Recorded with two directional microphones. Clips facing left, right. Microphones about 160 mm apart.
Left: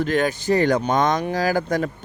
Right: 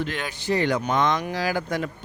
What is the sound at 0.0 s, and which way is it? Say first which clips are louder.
Speech: left 9 dB; 45° left (ahead or behind).